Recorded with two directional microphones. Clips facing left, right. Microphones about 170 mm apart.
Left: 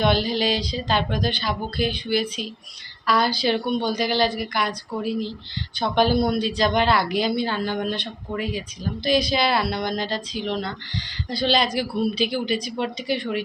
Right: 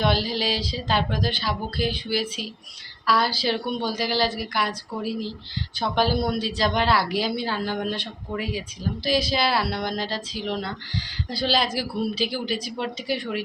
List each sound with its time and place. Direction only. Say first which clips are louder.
0.0 s a woman's voice: left 3 dB; 5° right (ahead or behind)